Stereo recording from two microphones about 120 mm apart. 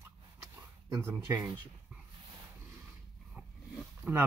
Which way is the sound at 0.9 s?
25° right (ahead or behind).